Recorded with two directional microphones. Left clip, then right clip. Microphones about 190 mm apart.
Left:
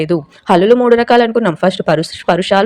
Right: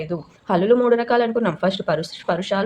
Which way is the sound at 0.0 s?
40° left (ahead or behind).